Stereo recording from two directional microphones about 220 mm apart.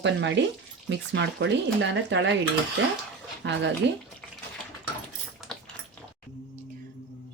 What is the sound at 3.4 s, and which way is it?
Speech, 50° right (ahead or behind).